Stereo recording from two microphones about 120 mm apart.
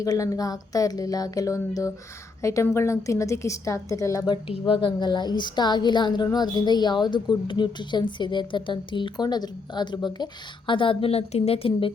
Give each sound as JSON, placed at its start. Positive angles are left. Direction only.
{"t": 0.0, "sound": "speech", "side_deg": 30}
{"t": 4.3, "sound": "a woman's voice", "side_deg": 50}